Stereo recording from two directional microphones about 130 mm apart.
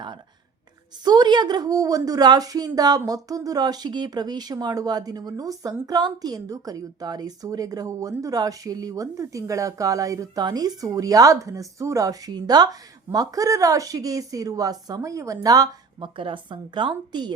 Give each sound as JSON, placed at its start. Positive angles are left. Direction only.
{"t": 1.0, "sound": "a woman's voice", "side_deg": -35}
{"t": 16.1, "sound": "speech", "side_deg": -40}